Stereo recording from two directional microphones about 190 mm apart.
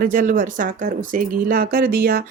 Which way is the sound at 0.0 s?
45° right (ahead or behind).